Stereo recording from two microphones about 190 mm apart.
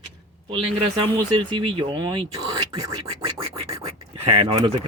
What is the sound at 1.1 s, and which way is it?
Speech, 25° right (ahead or behind).